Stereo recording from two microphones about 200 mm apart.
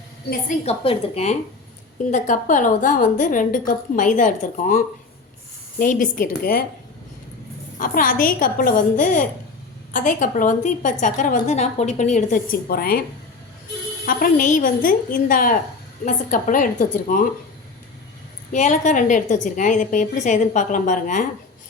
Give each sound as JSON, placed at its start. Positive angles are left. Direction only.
{"t": 0.6, "sound": "a woman's voice", "side_deg": 30}
{"t": 5.8, "sound": "a woman's voice", "side_deg": 45}
{"t": 7.8, "sound": "a woman's voice", "side_deg": 45}
{"t": 14.0, "sound": "a woman's voice", "side_deg": 45}
{"t": 18.5, "sound": "a woman's voice", "side_deg": 40}